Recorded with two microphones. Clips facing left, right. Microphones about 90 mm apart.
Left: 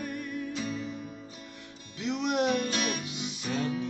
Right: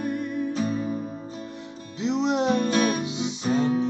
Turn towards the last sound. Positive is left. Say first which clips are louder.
# right 8 dB
turn(degrees=-30)  # may be behind; listen again after turning